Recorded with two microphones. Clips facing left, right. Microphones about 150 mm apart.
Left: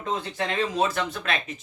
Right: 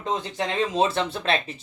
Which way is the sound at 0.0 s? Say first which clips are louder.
Right 1 dB; 20° right (ahead or behind).